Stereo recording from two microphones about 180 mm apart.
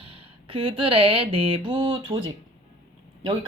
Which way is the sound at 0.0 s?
30° right (ahead or behind).